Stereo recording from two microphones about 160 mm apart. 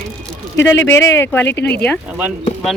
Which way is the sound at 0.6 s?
15° left (ahead or behind).